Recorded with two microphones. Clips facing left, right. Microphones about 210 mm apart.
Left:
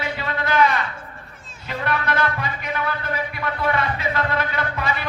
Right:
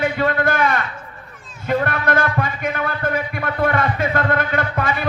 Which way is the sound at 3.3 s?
50° right (ahead or behind).